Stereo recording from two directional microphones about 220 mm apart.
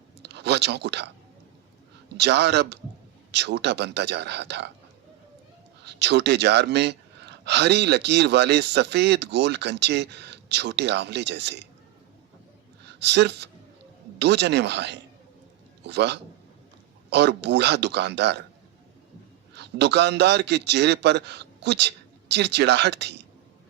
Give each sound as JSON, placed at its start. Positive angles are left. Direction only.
{"t": 0.2, "sound": "a sound", "side_deg": -50}
{"t": 2.1, "sound": "speech", "side_deg": -50}
{"t": 5.8, "sound": "speech", "side_deg": -50}
{"t": 12.8, "sound": "a man's voice", "side_deg": -50}
{"t": 19.5, "sound": "speech", "side_deg": -50}